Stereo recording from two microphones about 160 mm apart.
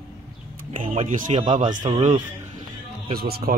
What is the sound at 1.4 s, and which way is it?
Speech, 50° right (ahead or behind).